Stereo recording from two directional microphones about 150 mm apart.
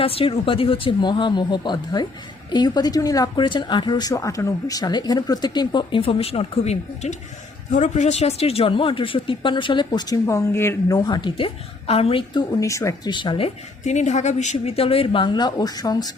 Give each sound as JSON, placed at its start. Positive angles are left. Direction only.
{"t": 0.0, "sound": "speech", "side_deg": 40}
{"t": 13.8, "sound": "speech", "side_deg": 50}